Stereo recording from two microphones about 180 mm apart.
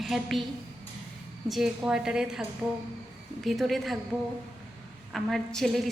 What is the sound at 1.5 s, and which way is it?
A woman's voice, centre (ahead or behind).